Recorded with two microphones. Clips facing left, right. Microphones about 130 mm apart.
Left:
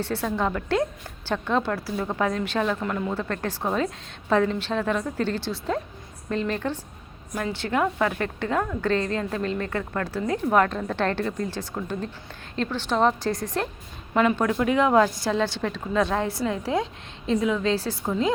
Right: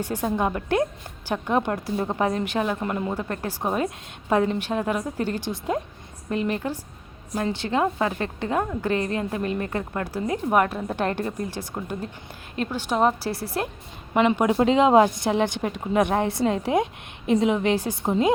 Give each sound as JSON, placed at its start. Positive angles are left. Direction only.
{"t": 0.0, "sound": "a woman's voice", "side_deg": -15}
{"t": 14.5, "sound": "a woman's voice", "side_deg": -25}